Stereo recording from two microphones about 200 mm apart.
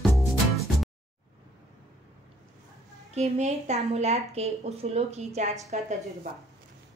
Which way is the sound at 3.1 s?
35° right (ahead or behind).